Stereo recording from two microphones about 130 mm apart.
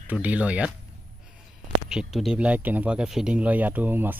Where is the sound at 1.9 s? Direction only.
5° right (ahead or behind).